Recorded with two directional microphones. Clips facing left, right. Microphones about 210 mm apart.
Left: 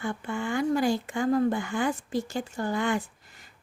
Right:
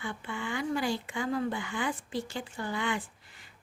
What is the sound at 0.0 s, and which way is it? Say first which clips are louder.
Speech: left 6 dB; 45° left (ahead or behind).